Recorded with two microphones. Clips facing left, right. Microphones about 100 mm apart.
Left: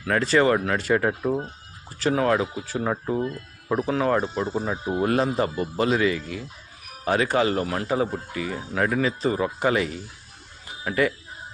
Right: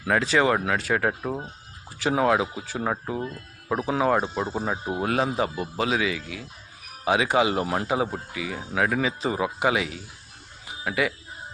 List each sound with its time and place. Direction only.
0.1 s speech: 5° right (ahead or behind)
2.0 s speech: 10° right (ahead or behind)
3.7 s speech: 10° right (ahead or behind)